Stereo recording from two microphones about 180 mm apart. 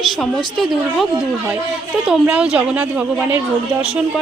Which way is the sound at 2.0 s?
5° right (ahead or behind).